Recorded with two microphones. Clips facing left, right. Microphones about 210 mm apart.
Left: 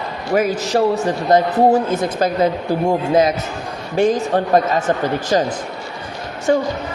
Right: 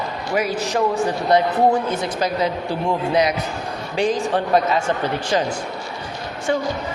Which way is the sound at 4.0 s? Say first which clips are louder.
Left 4 dB; 45° left (ahead or behind).